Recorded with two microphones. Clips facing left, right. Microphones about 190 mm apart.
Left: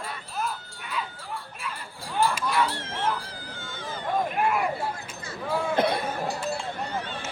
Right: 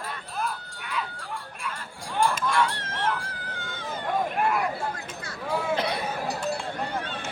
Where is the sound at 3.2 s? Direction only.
55° right (ahead or behind).